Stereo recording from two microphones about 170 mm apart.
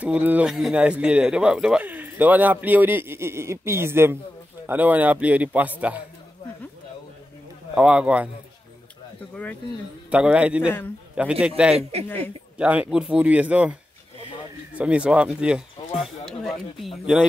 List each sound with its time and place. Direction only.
0.0 s speech: 10° right (ahead or behind)
7.7 s speech: 5° right (ahead or behind)
9.3 s speech: 10° left (ahead or behind)
10.0 s speech: 5° right (ahead or behind)
11.7 s a man's voice: 35° right (ahead or behind)
12.5 s speech: 10° right (ahead or behind)